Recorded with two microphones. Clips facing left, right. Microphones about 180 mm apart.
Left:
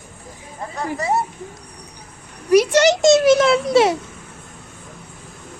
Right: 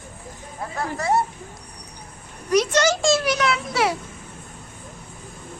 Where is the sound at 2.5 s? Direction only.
10° left (ahead or behind).